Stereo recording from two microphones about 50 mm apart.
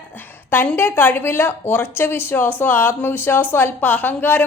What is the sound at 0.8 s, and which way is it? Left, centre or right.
A woman's voice, left.